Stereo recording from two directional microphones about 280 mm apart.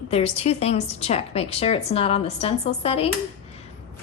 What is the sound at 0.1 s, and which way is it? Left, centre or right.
A woman's voice, left.